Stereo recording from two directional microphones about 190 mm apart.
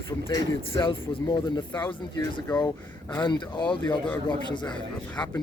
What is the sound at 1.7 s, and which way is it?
A man's voice, 10° left (ahead or behind).